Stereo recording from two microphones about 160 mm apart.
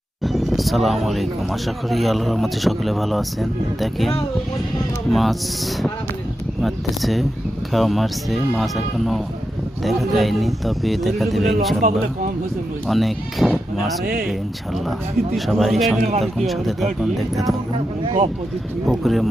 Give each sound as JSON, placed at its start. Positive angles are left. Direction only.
{"t": 0.2, "sound": "speech", "side_deg": 0}
{"t": 5.1, "sound": "speech", "side_deg": 0}
{"t": 6.6, "sound": "speech", "side_deg": 0}
{"t": 11.8, "sound": "speech", "side_deg": -60}
{"t": 12.9, "sound": "speech", "side_deg": 0}
{"t": 14.0, "sound": "speech", "side_deg": -65}
{"t": 15.4, "sound": "speech", "side_deg": 0}
{"t": 16.0, "sound": "a man's voice", "side_deg": -40}
{"t": 16.2, "sound": "speech", "side_deg": 0}
{"t": 18.9, "sound": "speech", "side_deg": 0}